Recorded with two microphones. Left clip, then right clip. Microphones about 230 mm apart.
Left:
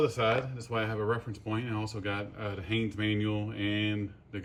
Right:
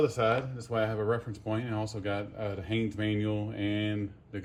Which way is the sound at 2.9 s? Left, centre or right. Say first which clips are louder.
Even; left.